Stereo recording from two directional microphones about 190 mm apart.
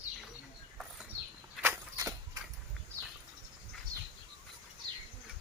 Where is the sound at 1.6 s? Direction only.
15° right (ahead or behind).